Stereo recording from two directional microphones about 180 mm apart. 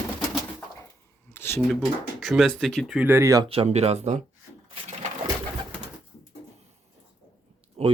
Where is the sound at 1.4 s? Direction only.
10° left (ahead or behind).